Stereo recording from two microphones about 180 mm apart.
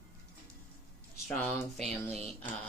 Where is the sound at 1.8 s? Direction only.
35° right (ahead or behind).